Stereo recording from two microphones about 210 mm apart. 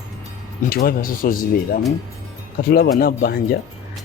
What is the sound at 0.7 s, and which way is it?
Speech, 45° left (ahead or behind).